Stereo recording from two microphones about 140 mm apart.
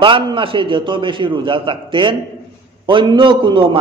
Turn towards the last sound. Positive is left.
turn(degrees=-35)  # may be behind; listen again after turning